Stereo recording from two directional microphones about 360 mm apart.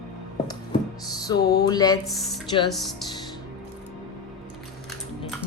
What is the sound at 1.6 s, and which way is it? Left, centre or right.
Speech, centre.